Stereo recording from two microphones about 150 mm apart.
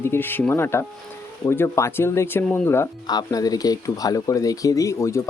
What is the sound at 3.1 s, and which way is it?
Speech, 25° left (ahead or behind).